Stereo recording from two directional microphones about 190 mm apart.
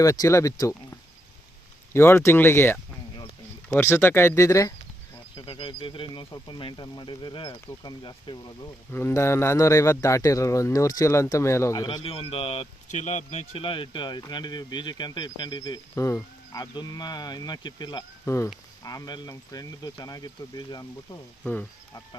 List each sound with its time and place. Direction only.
0.0 s speech: 15° left (ahead or behind)
5.4 s speech: 25° left (ahead or behind)
8.9 s speech: 10° left (ahead or behind)
21.4 s speech: 5° left (ahead or behind)